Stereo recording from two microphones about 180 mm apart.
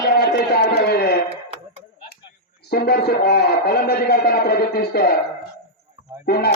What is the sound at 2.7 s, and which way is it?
A man's voice, 60° left (ahead or behind).